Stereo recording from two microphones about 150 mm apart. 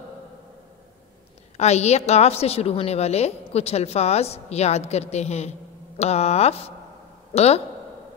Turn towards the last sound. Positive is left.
turn(degrees=45)  # may be behind; listen again after turning